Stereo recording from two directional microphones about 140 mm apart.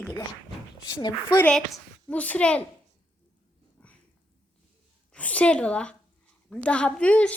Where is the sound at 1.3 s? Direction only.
10° left (ahead or behind).